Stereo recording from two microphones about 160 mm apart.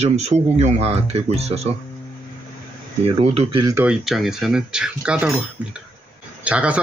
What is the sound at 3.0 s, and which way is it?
Speech, 40° right (ahead or behind).